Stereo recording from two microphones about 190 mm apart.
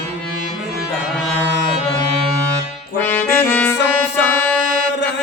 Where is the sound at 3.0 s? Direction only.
10° left (ahead or behind).